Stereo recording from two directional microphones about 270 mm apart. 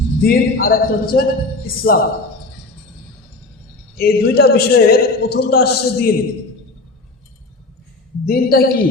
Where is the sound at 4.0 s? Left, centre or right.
Left.